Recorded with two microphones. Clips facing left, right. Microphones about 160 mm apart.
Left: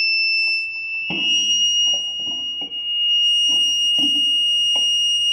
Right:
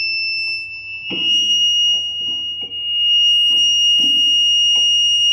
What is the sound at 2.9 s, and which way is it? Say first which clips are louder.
Fire alarm: right 3 dB; 35° left (ahead or behind).